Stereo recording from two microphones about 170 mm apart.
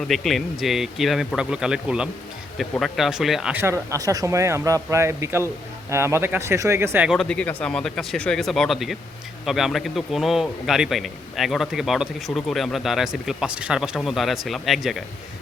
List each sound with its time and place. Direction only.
0.1 s a man's voice: centre (ahead or behind)
7.1 s a man's voice: 5° left (ahead or behind)